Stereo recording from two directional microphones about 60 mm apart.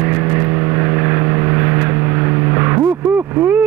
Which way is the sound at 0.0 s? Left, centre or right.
Right.